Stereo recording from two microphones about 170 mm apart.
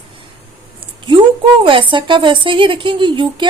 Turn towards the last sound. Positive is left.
turn(degrees=-30)  # may be behind; listen again after turning